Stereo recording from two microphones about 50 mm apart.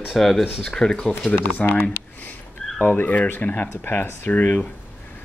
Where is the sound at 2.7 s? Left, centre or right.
Left.